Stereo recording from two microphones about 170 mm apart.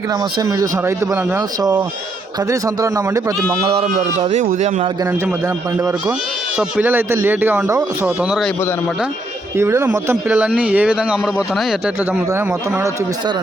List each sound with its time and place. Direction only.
0.1 s speech: 20° right (ahead or behind)
3.7 s a man's voice: 35° right (ahead or behind)
6.6 s speech: 10° right (ahead or behind)
8.0 s speech: 5° right (ahead or behind)
9.6 s speech: 15° right (ahead or behind)
12.3 s speech: 15° right (ahead or behind)